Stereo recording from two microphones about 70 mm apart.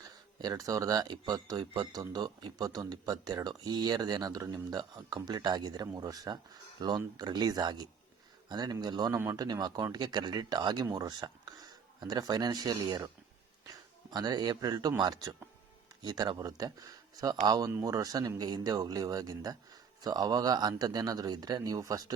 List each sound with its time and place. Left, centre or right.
0.0 s speech: right
6.0 s speech: right
9.3 s speech: right
10.8 s speech: right
14.1 s speech: right
16.0 s speech: right